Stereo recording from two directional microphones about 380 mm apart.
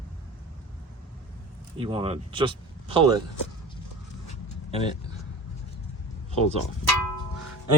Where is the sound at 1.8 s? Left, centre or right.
Centre.